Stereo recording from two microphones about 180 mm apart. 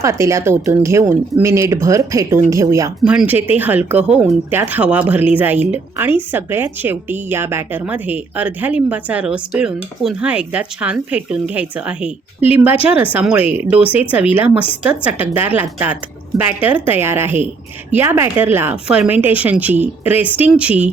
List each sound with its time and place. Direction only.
0.0 s speech: 15° right (ahead or behind)
3.0 s speech: 5° right (ahead or behind)